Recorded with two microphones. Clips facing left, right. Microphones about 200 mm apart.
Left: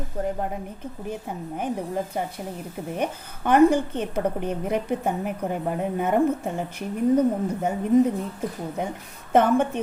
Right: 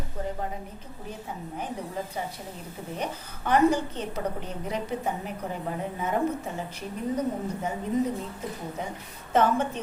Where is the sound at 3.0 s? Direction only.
55° left (ahead or behind).